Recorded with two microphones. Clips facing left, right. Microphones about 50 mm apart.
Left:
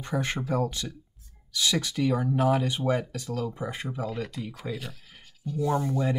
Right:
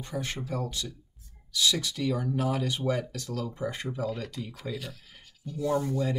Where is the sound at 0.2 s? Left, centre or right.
Left.